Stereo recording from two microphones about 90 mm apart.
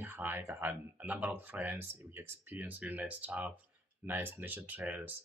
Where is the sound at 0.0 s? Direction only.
20° right (ahead or behind).